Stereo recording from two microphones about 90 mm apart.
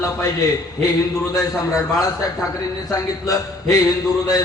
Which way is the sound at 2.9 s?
40° left (ahead or behind).